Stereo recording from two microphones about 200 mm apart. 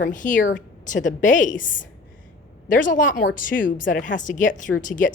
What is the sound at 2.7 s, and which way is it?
Speech, 40° left (ahead or behind).